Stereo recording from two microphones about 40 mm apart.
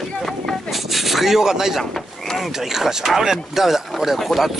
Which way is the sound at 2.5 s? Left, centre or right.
Centre.